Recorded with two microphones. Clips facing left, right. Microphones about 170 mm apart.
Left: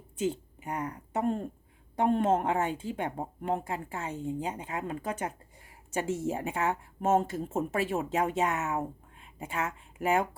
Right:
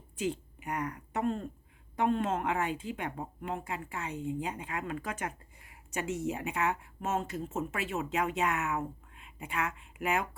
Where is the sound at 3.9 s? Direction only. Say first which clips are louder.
Even; 45° left (ahead or behind).